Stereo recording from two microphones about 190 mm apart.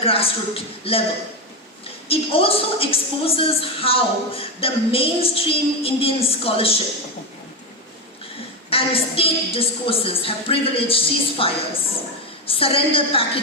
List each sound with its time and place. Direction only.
0.0 s a woman's voice: 30° left (ahead or behind)
2.0 s a woman's voice: 30° left (ahead or behind)
8.7 s a woman's voice: 30° left (ahead or behind)